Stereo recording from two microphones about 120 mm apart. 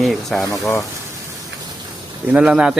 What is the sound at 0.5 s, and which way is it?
Speech, 30° left (ahead or behind).